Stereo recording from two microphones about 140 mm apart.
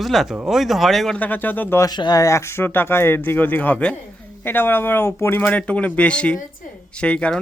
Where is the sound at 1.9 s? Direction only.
30° left (ahead or behind).